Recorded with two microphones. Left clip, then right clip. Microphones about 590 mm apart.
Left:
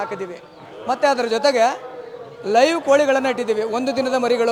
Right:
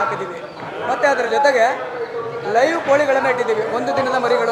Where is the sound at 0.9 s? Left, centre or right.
Left.